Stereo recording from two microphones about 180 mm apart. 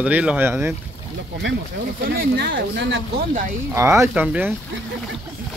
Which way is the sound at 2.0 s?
60° right (ahead or behind).